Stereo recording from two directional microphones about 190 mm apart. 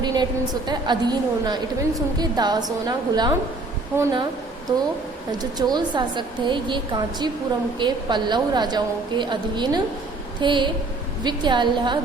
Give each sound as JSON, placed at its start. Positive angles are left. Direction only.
{"t": 0.0, "sound": "a woman's voice", "side_deg": -20}
{"t": 5.4, "sound": "a woman's voice", "side_deg": -20}